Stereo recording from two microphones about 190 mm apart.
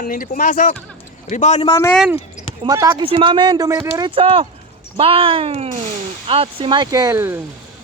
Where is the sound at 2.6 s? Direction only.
20° right (ahead or behind).